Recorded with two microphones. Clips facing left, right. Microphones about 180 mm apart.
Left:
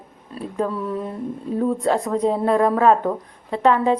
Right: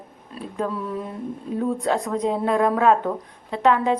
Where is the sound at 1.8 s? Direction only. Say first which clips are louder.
Left 3 dB; 5° left (ahead or behind).